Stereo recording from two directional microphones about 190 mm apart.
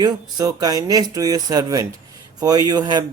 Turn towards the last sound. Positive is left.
turn(degrees=-20)  # may be behind; listen again after turning